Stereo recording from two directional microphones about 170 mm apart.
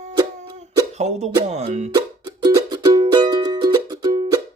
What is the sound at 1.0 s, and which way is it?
Speech, 40° right (ahead or behind).